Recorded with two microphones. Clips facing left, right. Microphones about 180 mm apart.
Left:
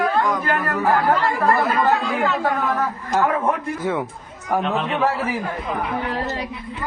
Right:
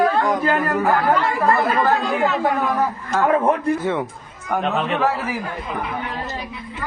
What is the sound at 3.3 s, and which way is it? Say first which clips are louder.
Speech: right 4 dB; 35° right (ahead or behind).